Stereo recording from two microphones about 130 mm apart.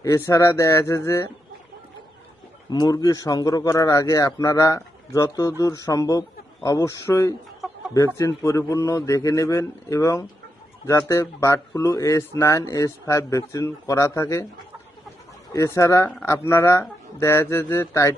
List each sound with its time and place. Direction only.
0.0 s speech: 25° left (ahead or behind)
2.6 s speech: 30° left (ahead or behind)
7.6 s chicken: centre (ahead or behind)
7.9 s speech: 20° left (ahead or behind)
15.5 s speech: 25° left (ahead or behind)